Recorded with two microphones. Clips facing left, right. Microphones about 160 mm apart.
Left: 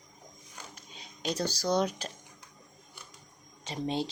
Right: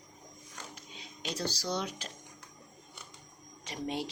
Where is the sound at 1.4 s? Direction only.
45° left (ahead or behind).